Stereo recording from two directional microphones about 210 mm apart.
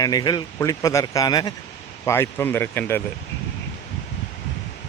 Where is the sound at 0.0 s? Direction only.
20° left (ahead or behind).